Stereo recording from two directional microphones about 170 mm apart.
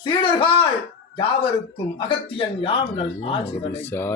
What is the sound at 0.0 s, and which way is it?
Speech, 30° left (ahead or behind).